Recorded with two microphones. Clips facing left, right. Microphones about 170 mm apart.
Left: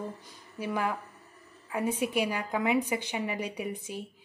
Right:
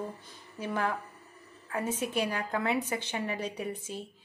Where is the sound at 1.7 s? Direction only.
10° left (ahead or behind).